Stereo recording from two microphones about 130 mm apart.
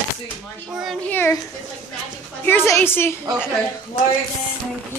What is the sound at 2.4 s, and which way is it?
Speech, 20° left (ahead or behind).